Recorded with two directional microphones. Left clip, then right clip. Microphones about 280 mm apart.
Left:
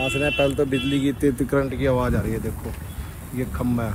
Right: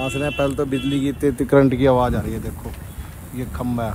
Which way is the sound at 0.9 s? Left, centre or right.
Right.